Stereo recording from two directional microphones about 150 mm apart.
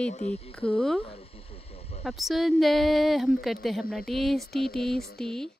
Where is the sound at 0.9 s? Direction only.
40° left (ahead or behind).